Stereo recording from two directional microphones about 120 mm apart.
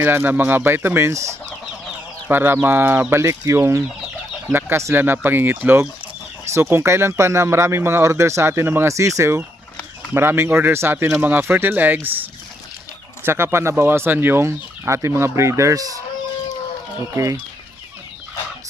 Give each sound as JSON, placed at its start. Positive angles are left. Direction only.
{"t": 0.0, "sound": "speech", "side_deg": -15}
{"t": 13.2, "sound": "speech", "side_deg": -20}